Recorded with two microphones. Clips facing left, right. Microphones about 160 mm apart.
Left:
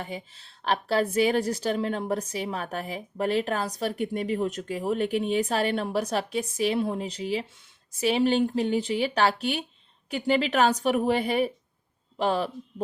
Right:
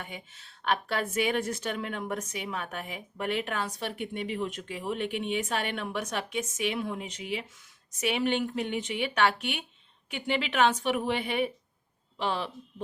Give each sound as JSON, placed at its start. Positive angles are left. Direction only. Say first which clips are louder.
{"t": 0.0, "sound": "a woman's voice", "louder": "left 6 dB", "side_deg": 30}